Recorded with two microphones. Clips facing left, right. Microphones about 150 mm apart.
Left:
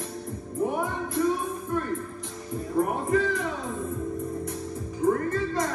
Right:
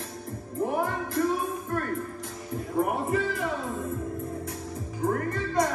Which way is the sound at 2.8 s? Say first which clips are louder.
Left 2 dB; 5° right (ahead or behind).